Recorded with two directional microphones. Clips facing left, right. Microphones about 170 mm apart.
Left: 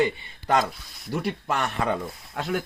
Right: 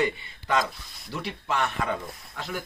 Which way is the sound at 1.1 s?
45° left (ahead or behind).